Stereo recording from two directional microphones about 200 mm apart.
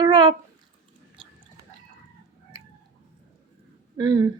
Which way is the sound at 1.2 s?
25° right (ahead or behind).